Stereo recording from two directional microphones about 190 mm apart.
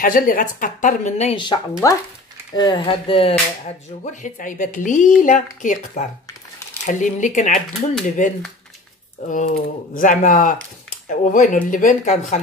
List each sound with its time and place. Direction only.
0.0 s speech: 45° left (ahead or behind)
9.3 s speech: 45° left (ahead or behind)